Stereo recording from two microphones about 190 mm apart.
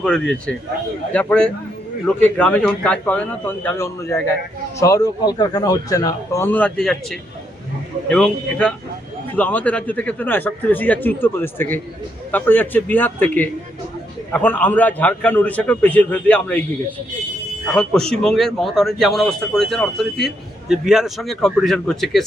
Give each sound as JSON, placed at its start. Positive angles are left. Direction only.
{"t": 0.0, "sound": "a man's voice", "side_deg": 5}
{"t": 17.7, "sound": "a man's voice", "side_deg": 5}